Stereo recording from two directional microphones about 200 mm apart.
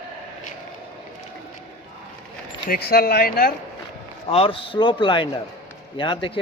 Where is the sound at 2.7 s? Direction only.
50° left (ahead or behind).